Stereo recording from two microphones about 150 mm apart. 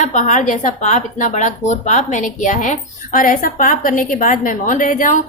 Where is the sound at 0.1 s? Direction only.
55° left (ahead or behind).